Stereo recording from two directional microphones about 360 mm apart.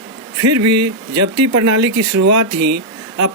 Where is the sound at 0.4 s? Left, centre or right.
Right.